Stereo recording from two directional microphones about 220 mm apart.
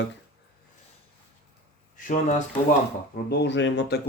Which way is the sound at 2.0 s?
35° left (ahead or behind).